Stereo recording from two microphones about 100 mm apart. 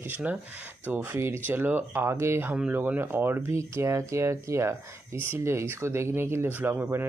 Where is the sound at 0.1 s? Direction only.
15° right (ahead or behind).